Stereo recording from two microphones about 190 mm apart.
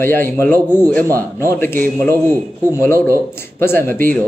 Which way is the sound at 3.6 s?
10° left (ahead or behind).